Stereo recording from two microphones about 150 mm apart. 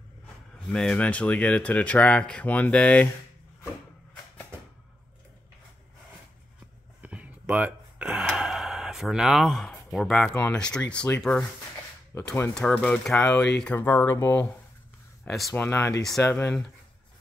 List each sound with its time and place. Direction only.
0.7 s speech: 5° left (ahead or behind)
7.0 s gasp: 10° right (ahead or behind)
10.4 s speech: 5° left (ahead or behind)
13.7 s speech: 20° left (ahead or behind)
15.2 s speech: centre (ahead or behind)
15.5 s speech: 15° left (ahead or behind)